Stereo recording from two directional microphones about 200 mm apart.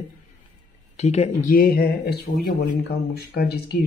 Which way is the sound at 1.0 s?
35° left (ahead or behind).